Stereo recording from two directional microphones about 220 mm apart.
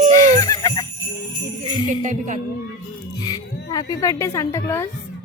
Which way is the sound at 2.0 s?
35° right (ahead or behind).